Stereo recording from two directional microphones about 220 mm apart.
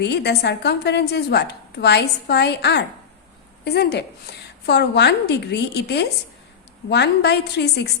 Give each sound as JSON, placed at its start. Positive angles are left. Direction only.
{"t": 0.0, "sound": "a woman's voice", "side_deg": 50}